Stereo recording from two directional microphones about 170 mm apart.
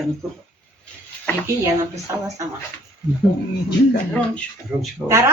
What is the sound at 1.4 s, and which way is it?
Speech, 15° right (ahead or behind).